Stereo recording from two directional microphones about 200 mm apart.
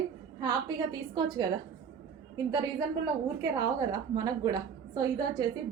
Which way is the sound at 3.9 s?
20° right (ahead or behind).